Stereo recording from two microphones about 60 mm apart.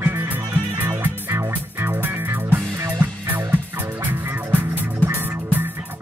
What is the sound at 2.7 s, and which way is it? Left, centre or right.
Music, right.